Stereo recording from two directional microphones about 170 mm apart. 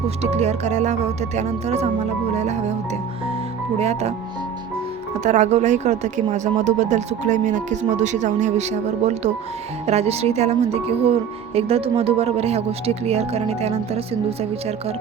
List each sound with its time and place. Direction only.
0.2 s speech: 40° right (ahead or behind)
3.8 s speech: 40° right (ahead or behind)
5.2 s speech: 45° right (ahead or behind)
9.8 s speech: 40° right (ahead or behind)